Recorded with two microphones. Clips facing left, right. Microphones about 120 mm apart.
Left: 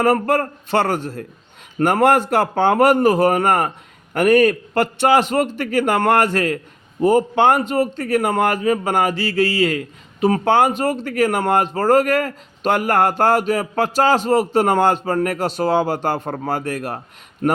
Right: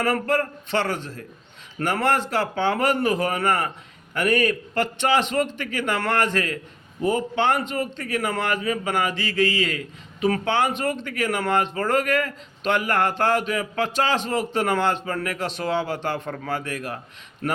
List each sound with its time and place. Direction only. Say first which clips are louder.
0.0 s a man's voice: left 6 dB; 45° left (ahead or behind)